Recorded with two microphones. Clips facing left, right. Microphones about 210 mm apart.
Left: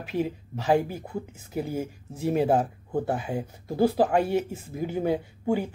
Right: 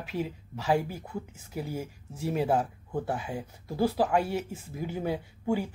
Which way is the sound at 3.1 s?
25° left (ahead or behind).